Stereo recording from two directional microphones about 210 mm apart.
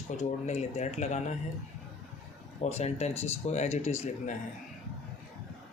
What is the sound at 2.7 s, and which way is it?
Speech, 30° left (ahead or behind).